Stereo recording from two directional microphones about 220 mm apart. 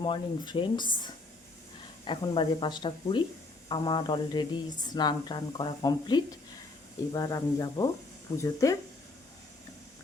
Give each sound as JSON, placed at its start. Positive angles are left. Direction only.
{"t": 0.0, "sound": "speech", "side_deg": 20}